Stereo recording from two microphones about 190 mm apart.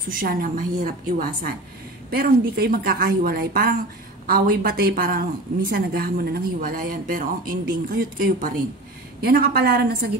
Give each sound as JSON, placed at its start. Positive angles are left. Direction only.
{"t": 0.1, "sound": "a woman's voice", "side_deg": -45}